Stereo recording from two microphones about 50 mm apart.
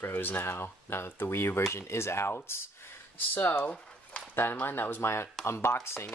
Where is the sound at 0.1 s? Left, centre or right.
Left.